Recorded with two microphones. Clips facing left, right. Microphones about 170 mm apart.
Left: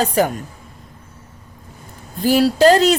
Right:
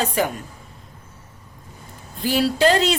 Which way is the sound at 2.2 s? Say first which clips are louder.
Left 5 dB; 40° left (ahead or behind).